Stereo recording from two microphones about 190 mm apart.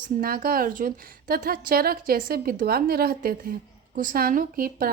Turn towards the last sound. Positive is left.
turn(degrees=-50)  # may be behind; listen again after turning